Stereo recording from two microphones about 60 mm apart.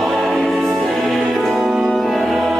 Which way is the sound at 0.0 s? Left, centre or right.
Centre.